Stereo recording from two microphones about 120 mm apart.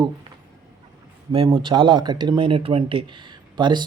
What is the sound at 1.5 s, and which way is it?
Speech, 40° right (ahead or behind).